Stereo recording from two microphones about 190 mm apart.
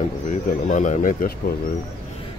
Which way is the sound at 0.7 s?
45° left (ahead or behind).